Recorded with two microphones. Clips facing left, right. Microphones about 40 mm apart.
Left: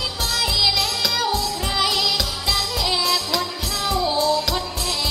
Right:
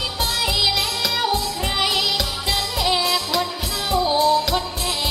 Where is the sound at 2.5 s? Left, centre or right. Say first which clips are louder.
Right 2 dB; right.